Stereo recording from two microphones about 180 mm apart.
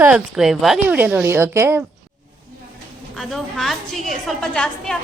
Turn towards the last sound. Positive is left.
turn(degrees=5)  # may be behind; listen again after turning